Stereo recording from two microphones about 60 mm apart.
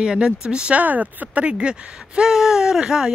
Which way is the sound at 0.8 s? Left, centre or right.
Right.